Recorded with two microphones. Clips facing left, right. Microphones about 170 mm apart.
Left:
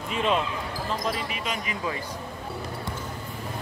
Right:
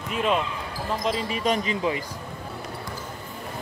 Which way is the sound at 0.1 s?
Centre (ahead or behind).